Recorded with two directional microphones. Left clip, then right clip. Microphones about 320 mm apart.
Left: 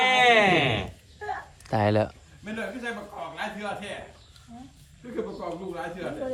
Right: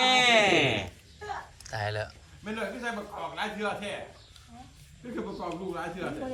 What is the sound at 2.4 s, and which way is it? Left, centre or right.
A man's voice, right.